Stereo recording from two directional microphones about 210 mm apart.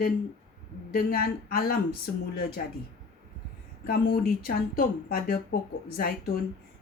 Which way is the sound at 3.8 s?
45° left (ahead or behind).